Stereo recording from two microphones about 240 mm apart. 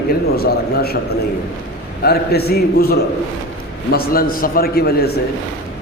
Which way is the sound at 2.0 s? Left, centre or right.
Left.